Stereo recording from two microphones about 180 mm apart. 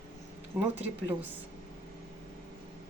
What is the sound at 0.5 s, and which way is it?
Speech, 5° right (ahead or behind).